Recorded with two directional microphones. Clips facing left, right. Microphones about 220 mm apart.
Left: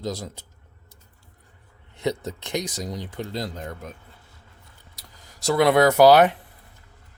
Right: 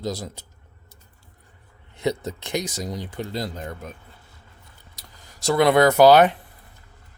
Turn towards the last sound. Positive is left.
turn(degrees=0)  # may be behind; listen again after turning